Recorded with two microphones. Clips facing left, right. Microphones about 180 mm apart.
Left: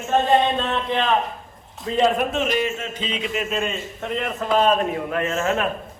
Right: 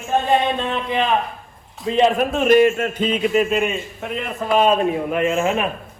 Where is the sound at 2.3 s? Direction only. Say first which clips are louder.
Right 9 dB; 50° right (ahead or behind).